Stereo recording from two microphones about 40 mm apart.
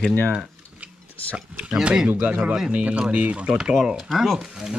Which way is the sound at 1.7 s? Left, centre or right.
Centre.